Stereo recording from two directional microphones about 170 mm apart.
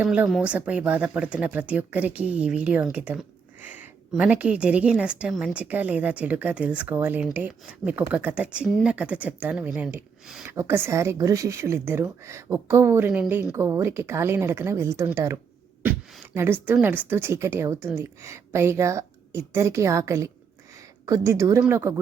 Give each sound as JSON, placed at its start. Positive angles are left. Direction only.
{"t": 0.0, "sound": "a woman's voice", "side_deg": -5}